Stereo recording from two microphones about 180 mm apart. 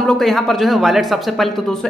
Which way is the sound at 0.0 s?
Centre (ahead or behind).